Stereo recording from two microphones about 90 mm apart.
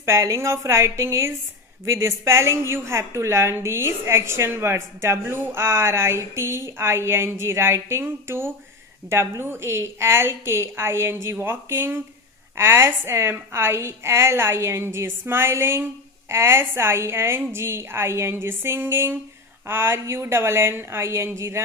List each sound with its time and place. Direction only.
0.0 s a woman's voice: 35° right (ahead or behind)